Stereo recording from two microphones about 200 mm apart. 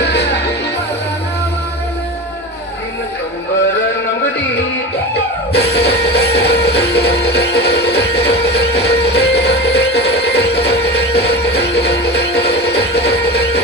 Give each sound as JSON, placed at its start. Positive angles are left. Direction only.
{"t": 0.0, "sound": "music", "side_deg": 55}
{"t": 5.5, "sound": "music", "side_deg": 55}